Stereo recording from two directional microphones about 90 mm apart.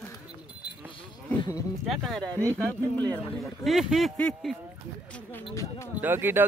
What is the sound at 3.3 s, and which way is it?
Speech, centre (ahead or behind).